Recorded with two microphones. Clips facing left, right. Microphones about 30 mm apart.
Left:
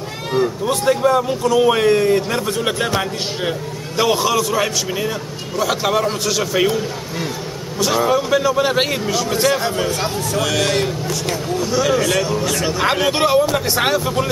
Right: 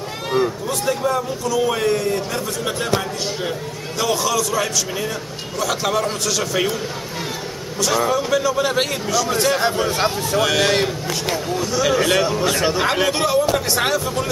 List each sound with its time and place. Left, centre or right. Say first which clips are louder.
0.3 s a sound: left 1 dB; centre
0.7 s a man's voice: left 5 dB; left
4.0 s a man's voice: left 3 dB; left; by 6.8 s centre
7.8 s a man's voice: left 2 dB; centre
9.3 s a man's voice: left 3 dB; centre
9.8 s a man's voice: right 1 dB; centre
13.1 s a man's voice: left 3 dB; left
13.5 s a man's voice: left 1 dB; centre